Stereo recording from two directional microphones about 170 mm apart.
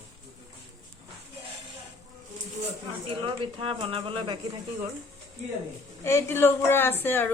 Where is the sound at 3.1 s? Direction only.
30° right (ahead or behind).